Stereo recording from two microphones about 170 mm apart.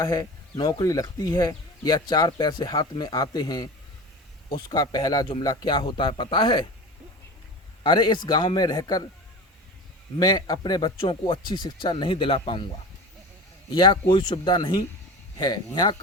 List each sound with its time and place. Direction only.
0.0 s speech: 20° left (ahead or behind)
7.9 s speech: 25° left (ahead or behind)
10.2 s speech: 20° left (ahead or behind)
13.7 s speech: 25° left (ahead or behind)